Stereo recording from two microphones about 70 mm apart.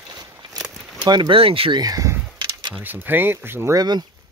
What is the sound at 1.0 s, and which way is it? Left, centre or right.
Speech, right.